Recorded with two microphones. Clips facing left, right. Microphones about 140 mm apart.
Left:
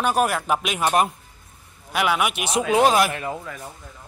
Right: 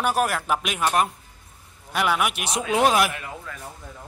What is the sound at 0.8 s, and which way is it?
Speech, 15° left (ahead or behind).